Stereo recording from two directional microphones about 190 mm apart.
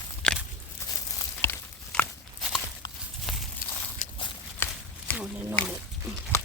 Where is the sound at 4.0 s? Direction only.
40° left (ahead or behind).